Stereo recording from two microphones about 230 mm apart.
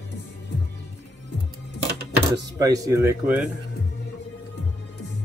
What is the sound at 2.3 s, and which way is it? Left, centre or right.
Speech, centre.